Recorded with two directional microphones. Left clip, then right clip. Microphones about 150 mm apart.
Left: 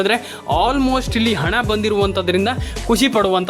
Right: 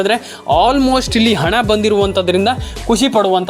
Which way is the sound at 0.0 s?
10° right (ahead or behind).